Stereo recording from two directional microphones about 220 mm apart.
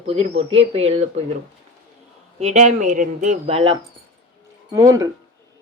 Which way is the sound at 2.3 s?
30° right (ahead or behind).